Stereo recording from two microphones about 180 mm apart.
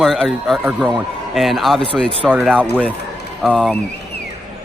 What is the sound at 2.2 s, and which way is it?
Speech, 10° right (ahead or behind).